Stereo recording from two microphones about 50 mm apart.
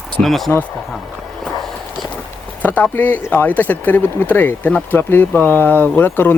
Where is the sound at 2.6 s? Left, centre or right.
Left.